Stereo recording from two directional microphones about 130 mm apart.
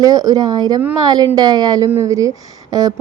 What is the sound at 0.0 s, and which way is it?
A woman's voice, 30° right (ahead or behind).